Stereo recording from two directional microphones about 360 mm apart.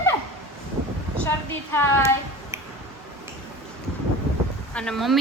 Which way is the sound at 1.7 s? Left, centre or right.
Centre.